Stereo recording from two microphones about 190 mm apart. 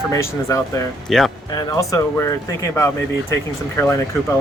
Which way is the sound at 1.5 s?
20° left (ahead or behind).